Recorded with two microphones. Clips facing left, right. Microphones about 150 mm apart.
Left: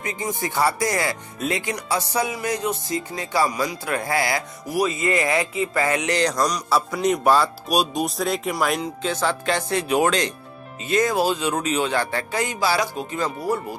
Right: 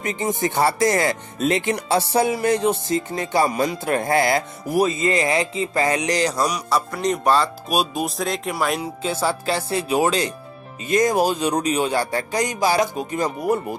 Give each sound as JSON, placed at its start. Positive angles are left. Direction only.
{"t": 0.0, "sound": "speech", "side_deg": -20}
{"t": 3.6, "sound": "music", "side_deg": -45}
{"t": 4.8, "sound": "speech", "side_deg": -30}
{"t": 6.2, "sound": "speech", "side_deg": -5}
{"t": 9.7, "sound": "speech", "side_deg": -30}
{"t": 11.1, "sound": "music", "side_deg": -45}
{"t": 11.7, "sound": "speech", "side_deg": -15}
{"t": 12.1, "sound": "speech", "side_deg": -40}
{"t": 13.1, "sound": "speech", "side_deg": -20}